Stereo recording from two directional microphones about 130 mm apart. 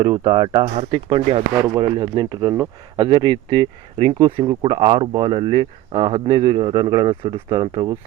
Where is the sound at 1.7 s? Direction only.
35° right (ahead or behind).